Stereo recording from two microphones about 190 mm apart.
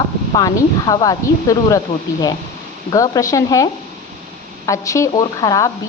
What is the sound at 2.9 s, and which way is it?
Speech, 15° left (ahead or behind).